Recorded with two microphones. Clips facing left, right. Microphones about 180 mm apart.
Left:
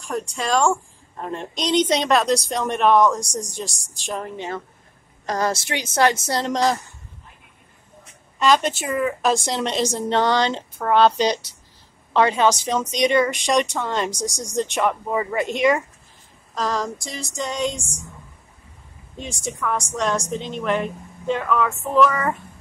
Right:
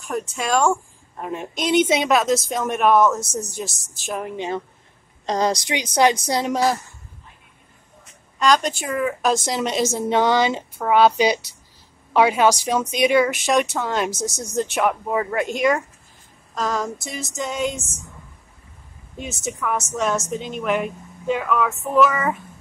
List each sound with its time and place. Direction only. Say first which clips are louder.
0.0 s a woman's voice: even; centre (ahead or behind)
4.3 s a woman's voice: right 3 dB; 15° right (ahead or behind)
8.4 s a woman's voice: even; centre (ahead or behind)
19.1 s a woman's voice: right 1 dB; 5° right (ahead or behind)